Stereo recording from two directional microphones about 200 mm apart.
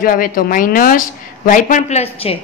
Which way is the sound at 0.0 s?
45° left (ahead or behind).